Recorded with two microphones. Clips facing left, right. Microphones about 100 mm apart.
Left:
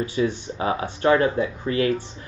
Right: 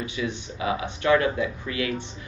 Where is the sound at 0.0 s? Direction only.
35° left (ahead or behind).